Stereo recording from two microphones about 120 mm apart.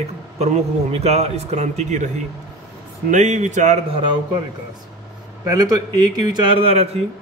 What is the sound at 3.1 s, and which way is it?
Speech, 90° right.